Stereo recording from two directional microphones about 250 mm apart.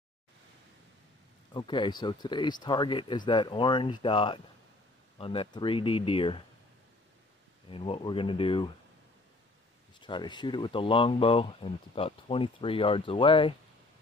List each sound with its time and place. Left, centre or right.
1.5 s speech: centre
7.7 s speech: left
9.9 s speech: centre